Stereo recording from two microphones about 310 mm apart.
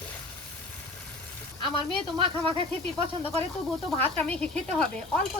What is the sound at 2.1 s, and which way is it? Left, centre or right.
Speech, centre.